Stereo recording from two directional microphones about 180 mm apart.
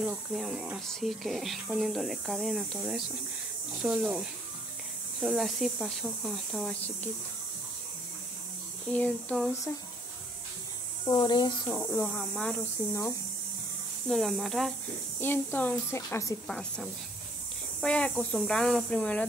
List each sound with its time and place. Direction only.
0.0 s speech: centre (ahead or behind)
5.2 s speech: centre (ahead or behind)
8.9 s speech: 10° left (ahead or behind)
11.1 s speech: 25° left (ahead or behind)
11.7 s speech: 10° left (ahead or behind)
14.0 s speech: centre (ahead or behind)
15.1 s speech: 10° left (ahead or behind)
16.4 s speech: 5° left (ahead or behind)